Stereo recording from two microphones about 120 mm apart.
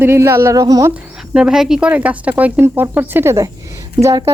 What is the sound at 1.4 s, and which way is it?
Speech, 5° right (ahead or behind).